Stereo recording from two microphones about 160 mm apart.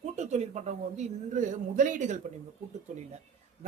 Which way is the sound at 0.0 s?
45° right (ahead or behind).